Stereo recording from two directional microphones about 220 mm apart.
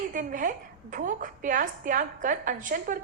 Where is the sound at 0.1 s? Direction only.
35° right (ahead or behind).